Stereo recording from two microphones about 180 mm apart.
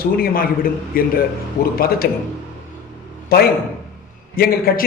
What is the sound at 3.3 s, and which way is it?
A man's voice, 55° left (ahead or behind).